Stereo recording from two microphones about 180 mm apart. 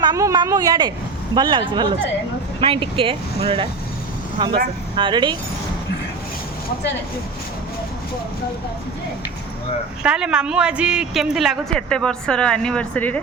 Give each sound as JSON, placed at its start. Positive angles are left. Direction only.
{"t": 0.0, "sound": "speech", "side_deg": -20}
{"t": 4.9, "sound": "speech", "side_deg": -25}
{"t": 10.0, "sound": "speech", "side_deg": -5}